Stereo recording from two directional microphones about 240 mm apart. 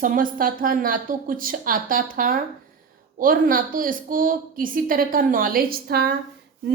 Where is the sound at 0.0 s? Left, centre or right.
Right.